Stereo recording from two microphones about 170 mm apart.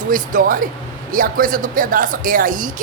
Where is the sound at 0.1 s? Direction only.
55° right (ahead or behind).